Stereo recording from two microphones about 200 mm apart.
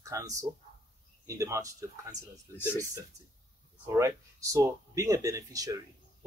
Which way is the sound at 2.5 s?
10° left (ahead or behind).